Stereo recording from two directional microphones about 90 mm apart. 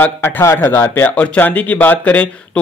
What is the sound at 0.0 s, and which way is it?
A man's voice, 25° left (ahead or behind).